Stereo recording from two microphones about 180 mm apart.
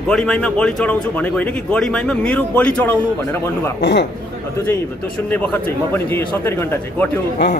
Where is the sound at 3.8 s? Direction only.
70° left (ahead or behind).